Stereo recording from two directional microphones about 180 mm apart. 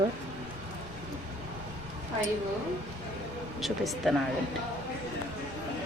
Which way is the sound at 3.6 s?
Centre (ahead or behind).